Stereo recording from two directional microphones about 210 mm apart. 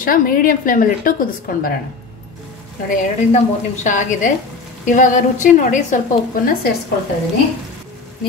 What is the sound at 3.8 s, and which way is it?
A woman's voice, 35° left (ahead or behind).